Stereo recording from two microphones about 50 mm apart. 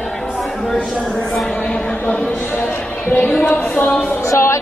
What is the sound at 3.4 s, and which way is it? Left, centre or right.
Speech, left.